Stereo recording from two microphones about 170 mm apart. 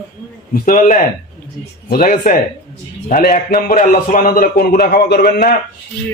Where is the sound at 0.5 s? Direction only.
50° left (ahead or behind).